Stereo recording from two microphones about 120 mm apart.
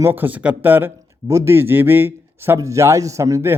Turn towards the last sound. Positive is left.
turn(degrees=-25)  # may be behind; listen again after turning